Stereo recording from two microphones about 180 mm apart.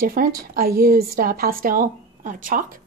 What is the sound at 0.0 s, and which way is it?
Speech, 50° right (ahead or behind).